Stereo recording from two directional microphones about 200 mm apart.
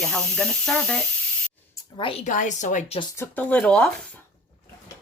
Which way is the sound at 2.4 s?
35° left (ahead or behind).